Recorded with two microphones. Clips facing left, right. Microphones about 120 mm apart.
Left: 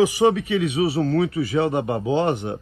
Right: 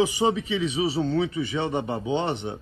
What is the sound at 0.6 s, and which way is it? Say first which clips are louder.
Speech: left 4 dB; 60° left (ahead or behind).